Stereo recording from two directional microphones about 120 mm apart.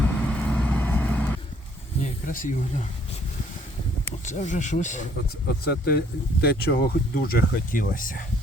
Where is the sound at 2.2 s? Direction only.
90° left.